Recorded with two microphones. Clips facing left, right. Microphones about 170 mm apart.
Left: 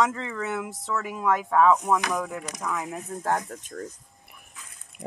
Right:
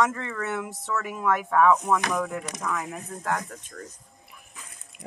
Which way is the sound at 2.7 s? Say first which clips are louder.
Left 2 dB; 15° left (ahead or behind).